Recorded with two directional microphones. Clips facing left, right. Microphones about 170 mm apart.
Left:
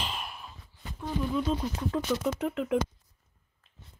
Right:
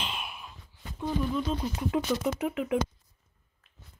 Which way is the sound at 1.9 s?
5° right (ahead or behind).